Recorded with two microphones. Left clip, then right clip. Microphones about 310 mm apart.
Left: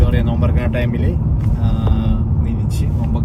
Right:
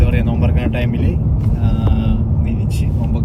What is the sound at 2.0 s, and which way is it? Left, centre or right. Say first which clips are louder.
Vehicle: right 1 dB; centre.